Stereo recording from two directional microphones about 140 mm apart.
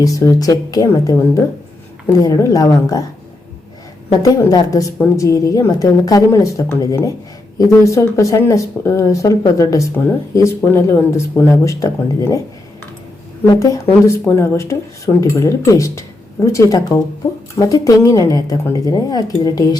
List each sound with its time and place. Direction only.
0.0 s speech: 25° left (ahead or behind)
4.2 s speech: 25° left (ahead or behind)
13.5 s speech: 25° left (ahead or behind)